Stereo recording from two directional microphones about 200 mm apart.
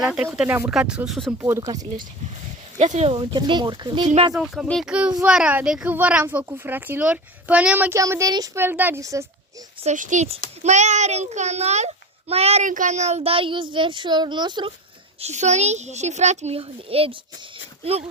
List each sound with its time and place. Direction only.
0.0 s speech: 5° right (ahead or behind)
1.4 s speech: 10° right (ahead or behind)
2.7 s speech: 35° right (ahead or behind)
4.4 s speech: centre (ahead or behind)
9.8 s a child's voice: 40° right (ahead or behind); by 14.7 s 20° right (ahead or behind)
15.2 s a child's voice: 35° right (ahead or behind)